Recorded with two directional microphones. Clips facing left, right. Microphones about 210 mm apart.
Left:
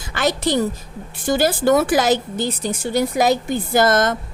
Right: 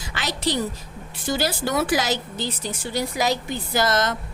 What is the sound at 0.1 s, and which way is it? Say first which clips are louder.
A woman's voice: left 7 dB; 50° left (ahead or behind).